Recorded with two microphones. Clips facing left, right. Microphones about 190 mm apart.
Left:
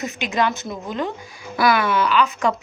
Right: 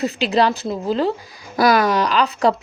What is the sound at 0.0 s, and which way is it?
Speech, 35° right (ahead or behind).